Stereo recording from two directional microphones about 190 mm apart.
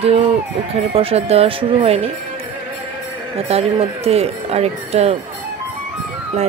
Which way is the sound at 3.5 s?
30° right (ahead or behind).